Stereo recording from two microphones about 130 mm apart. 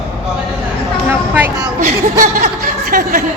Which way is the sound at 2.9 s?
90° right.